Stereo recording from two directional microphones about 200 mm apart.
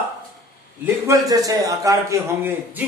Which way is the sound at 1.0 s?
15° right (ahead or behind).